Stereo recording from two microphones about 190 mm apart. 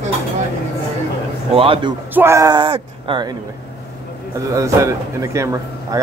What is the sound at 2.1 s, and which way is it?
Speech, 15° right (ahead or behind).